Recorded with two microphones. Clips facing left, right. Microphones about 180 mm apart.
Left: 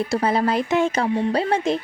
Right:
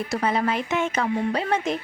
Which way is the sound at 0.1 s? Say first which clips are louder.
Left 2 dB; 35° left (ahead or behind).